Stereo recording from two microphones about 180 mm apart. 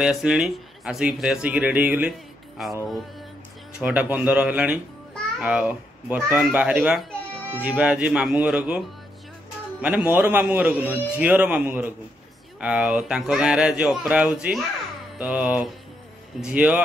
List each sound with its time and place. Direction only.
0.0 s speech: 5° right (ahead or behind)
3.8 s a child's voice: 10° right (ahead or behind)